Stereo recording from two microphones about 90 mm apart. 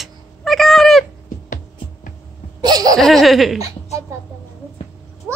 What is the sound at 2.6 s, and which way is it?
Laughter, 50° right (ahead or behind).